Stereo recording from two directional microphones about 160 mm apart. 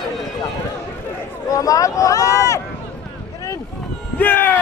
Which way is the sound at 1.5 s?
20° left (ahead or behind).